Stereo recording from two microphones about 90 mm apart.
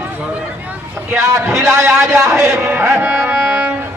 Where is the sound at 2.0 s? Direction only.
35° right (ahead or behind).